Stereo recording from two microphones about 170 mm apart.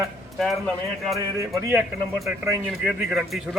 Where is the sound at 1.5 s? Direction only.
15° right (ahead or behind).